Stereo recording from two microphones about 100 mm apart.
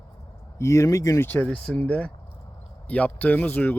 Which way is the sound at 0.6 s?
30° left (ahead or behind).